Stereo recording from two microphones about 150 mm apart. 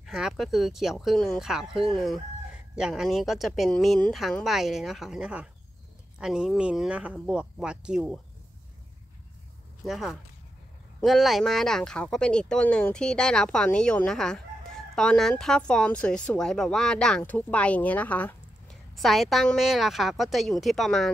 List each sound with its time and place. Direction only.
0.0 s a woman's voice: centre (ahead or behind)
9.8 s a woman's voice: centre (ahead or behind)